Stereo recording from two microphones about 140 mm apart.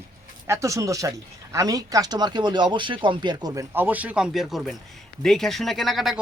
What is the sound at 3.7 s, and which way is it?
Speech, 15° right (ahead or behind).